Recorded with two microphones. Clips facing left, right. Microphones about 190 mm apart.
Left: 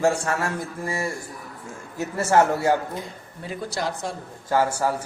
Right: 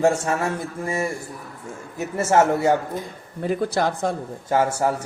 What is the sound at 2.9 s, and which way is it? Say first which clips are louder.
Speech: right 4 dB; 50° right (ahead or behind).